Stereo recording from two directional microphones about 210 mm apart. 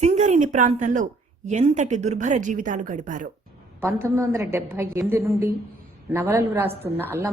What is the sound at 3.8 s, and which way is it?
A woman's voice, 10° right (ahead or behind).